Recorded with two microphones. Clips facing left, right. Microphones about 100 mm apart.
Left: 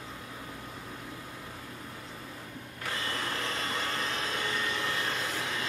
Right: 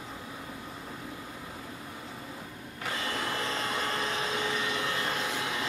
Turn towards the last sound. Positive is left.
turn(degrees=-5)  # may be behind; listen again after turning